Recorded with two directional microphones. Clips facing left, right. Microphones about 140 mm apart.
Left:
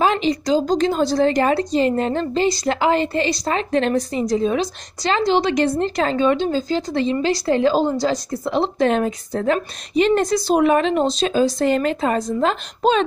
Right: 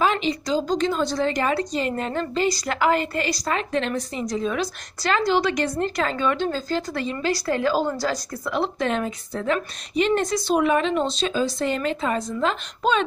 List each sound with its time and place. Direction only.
0.0 s a woman's voice: 40° left (ahead or behind)